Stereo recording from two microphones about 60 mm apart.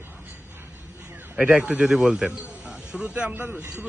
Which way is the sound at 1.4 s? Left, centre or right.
Right.